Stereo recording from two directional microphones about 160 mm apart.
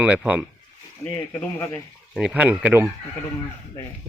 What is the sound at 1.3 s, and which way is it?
Speech, 15° left (ahead or behind).